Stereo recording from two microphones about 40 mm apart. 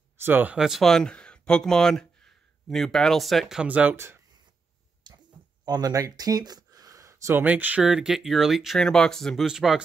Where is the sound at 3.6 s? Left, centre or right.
Right.